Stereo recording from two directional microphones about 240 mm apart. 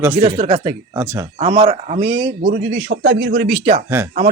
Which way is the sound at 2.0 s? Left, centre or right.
Right.